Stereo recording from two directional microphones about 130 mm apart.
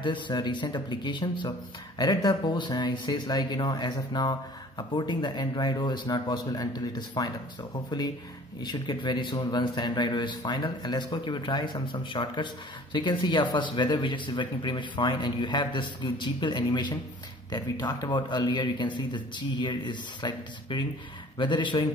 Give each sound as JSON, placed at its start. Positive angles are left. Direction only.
{"t": 0.0, "sound": "speech", "side_deg": 35}